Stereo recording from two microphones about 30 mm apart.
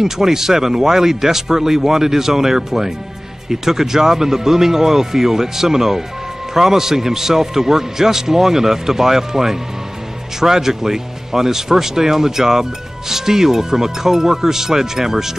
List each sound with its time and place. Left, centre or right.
0.0 s a man's voice: centre